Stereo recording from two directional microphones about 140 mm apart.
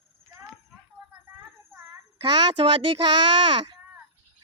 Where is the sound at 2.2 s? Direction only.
35° right (ahead or behind).